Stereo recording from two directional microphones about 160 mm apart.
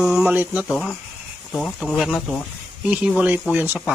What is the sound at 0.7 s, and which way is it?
Speech, centre (ahead or behind).